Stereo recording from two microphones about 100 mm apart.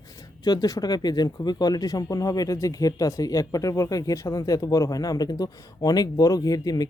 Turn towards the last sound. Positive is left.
turn(degrees=40)  # may be behind; listen again after turning